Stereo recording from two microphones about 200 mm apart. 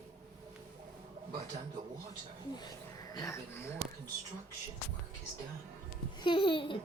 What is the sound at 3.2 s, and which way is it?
Speech, 15° left (ahead or behind).